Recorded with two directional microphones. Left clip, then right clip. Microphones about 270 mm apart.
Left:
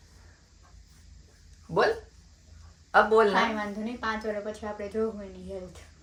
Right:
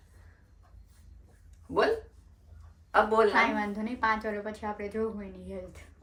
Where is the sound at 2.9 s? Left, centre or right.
Centre.